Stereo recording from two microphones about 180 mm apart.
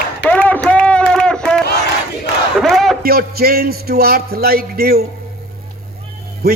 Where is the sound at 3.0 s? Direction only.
60° right (ahead or behind).